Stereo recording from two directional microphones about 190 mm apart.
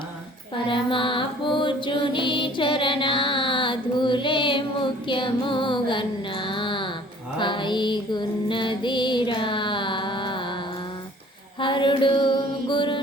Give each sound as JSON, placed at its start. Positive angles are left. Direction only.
{"t": 0.5, "sound": "music", "side_deg": 25}
{"t": 11.6, "sound": "mantra", "side_deg": 25}